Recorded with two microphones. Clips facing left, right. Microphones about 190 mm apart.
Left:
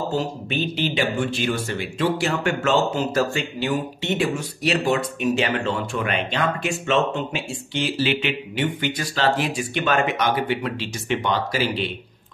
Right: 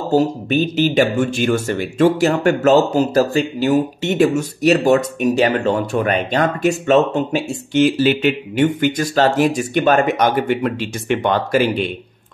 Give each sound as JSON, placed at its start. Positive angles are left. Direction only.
{"t": 0.1, "sound": "speech", "side_deg": -40}